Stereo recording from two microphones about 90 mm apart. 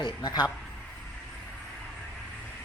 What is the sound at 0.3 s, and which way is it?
Speech, 45° left (ahead or behind).